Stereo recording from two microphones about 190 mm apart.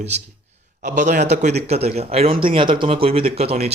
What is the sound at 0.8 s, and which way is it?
Speech, 45° right (ahead or behind).